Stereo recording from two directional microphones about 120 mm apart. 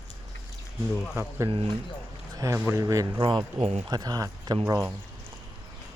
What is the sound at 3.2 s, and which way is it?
Speech, 45° right (ahead or behind).